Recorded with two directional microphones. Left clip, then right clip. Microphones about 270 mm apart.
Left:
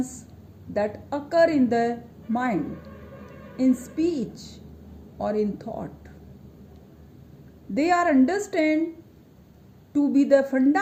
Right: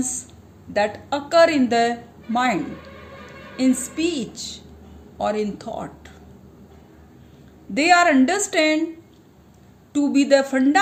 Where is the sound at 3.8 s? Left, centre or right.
Centre.